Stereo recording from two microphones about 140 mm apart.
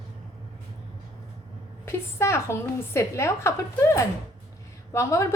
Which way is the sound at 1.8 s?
20° left (ahead or behind).